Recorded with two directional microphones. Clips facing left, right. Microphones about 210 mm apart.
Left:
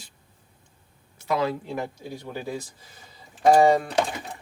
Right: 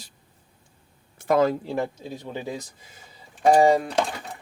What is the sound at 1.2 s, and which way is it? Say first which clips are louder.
Speech: right 5 dB; 50° right (ahead or behind).